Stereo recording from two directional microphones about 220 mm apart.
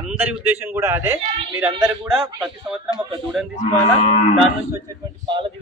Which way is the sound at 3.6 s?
30° left (ahead or behind).